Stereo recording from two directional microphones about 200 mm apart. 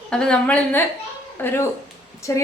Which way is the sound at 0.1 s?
5° left (ahead or behind).